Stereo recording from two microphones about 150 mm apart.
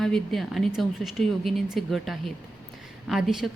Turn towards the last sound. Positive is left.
turn(degrees=-5)  # may be behind; listen again after turning